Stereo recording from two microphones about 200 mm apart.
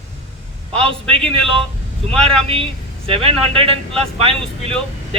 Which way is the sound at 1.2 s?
5° left (ahead or behind).